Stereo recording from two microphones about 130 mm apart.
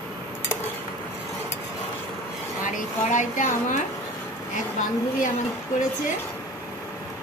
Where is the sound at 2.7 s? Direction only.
75° left (ahead or behind).